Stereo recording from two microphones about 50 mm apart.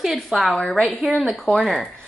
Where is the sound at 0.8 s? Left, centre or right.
Centre.